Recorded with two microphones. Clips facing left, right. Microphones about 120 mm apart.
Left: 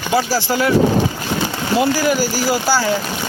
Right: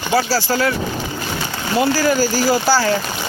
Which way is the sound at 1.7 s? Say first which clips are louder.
Even; 15° left (ahead or behind).